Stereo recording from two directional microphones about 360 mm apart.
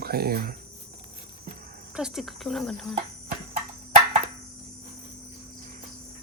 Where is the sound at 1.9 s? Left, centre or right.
Centre.